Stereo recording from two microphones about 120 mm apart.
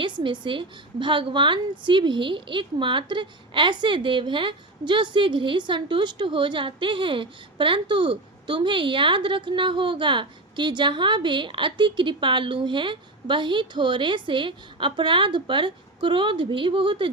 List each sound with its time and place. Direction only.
0.0 s a woman's voice: 40° right (ahead or behind)